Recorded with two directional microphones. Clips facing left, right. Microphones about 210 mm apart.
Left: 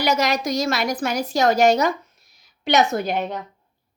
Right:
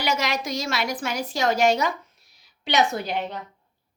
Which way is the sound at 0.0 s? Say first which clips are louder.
Left 5 dB; 40° left (ahead or behind).